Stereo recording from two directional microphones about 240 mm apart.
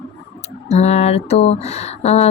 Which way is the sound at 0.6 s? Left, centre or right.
Left.